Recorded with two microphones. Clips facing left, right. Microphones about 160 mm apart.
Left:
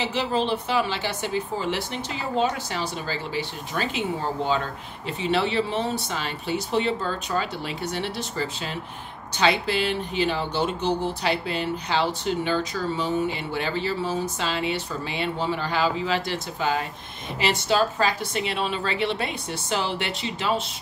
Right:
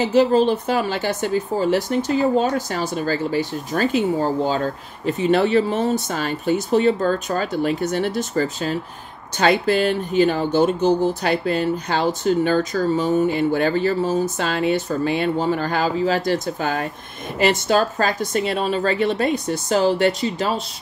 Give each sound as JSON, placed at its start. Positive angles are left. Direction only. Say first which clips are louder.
{"t": 0.0, "sound": "a woman's voice", "louder": "right 9 dB", "side_deg": -45}